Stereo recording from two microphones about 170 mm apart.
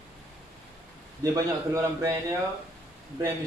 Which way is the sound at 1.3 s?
20° right (ahead or behind).